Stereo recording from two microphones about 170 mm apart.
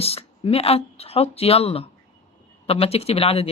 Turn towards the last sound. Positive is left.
turn(degrees=35)  # may be behind; listen again after turning